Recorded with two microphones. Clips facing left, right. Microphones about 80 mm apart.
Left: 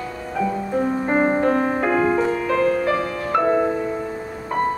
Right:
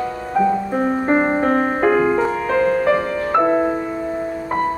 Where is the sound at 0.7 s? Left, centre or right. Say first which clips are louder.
Right 2 dB; right.